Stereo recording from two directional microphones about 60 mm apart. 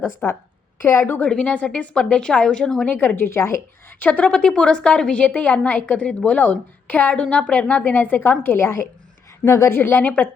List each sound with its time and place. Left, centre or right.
0.2 s a woman's voice: left
1.2 s a woman's voice: centre
3.2 s speech: left
4.0 s a woman's voice: centre; by 8.6 s left
8.6 s speech: left
9.7 s a woman's voice: left